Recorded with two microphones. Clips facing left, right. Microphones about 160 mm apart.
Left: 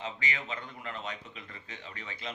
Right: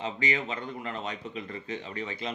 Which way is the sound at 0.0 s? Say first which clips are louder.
Right 6 dB; 25° right (ahead or behind).